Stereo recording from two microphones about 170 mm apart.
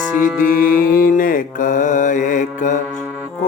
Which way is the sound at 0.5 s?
55° left (ahead or behind).